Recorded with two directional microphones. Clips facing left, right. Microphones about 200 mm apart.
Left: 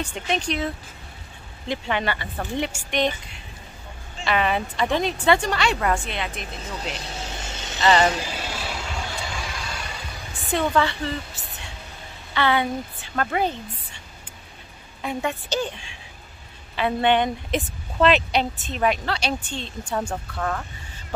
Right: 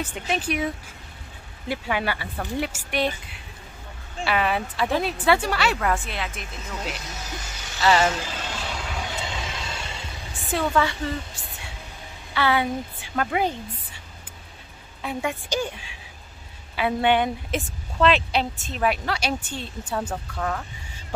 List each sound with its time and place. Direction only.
0.0 s a woman's voice: 5° right (ahead or behind)
4.2 s a woman's voice: 5° right (ahead or behind)
6.4 s vehicle: 30° left (ahead or behind)
8.0 s vehicle: 15° left (ahead or behind)
9.0 s vehicle: 20° right (ahead or behind)
10.3 s a woman's voice: centre (ahead or behind)